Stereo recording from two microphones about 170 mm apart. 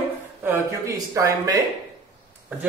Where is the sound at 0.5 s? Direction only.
20° right (ahead or behind).